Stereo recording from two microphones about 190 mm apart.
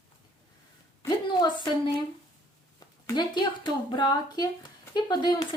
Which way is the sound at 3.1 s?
20° left (ahead or behind).